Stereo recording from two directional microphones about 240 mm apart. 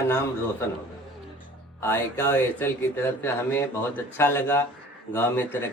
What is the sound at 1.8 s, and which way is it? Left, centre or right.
Speech, centre.